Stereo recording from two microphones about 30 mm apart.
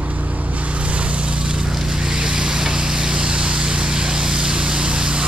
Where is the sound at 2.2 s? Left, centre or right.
Right.